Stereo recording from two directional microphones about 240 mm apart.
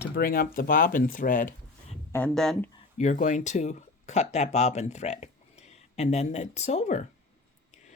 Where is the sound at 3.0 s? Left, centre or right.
Left.